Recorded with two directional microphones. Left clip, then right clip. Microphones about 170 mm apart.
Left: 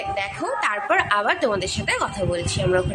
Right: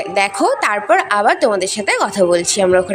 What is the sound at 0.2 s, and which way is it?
A woman's voice, 40° right (ahead or behind).